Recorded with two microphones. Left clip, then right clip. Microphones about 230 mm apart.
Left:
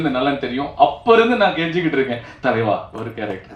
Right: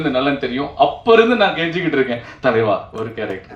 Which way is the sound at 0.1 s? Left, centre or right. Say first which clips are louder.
Right 2 dB; right.